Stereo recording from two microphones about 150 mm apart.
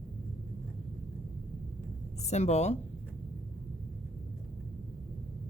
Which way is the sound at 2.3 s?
50° left (ahead or behind).